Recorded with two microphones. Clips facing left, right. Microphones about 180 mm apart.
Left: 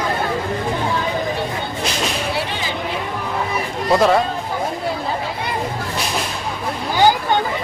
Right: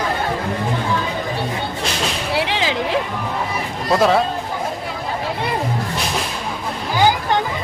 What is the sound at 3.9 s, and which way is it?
Speech, centre (ahead or behind).